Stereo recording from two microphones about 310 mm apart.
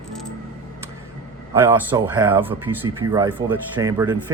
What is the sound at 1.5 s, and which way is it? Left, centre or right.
Speech, centre.